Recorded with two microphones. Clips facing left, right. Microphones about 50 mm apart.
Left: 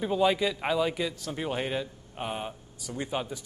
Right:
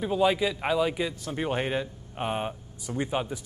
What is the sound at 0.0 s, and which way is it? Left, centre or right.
Speech, centre.